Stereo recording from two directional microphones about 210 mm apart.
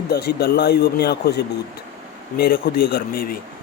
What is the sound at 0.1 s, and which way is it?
Speech, 50° left (ahead or behind).